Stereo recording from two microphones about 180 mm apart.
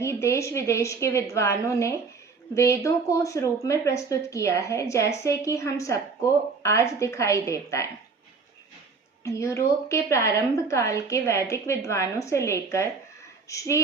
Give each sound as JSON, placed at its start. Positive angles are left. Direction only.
{"t": 0.0, "sound": "a woman's voice", "side_deg": 15}
{"t": 9.2, "sound": "a woman's voice", "side_deg": 15}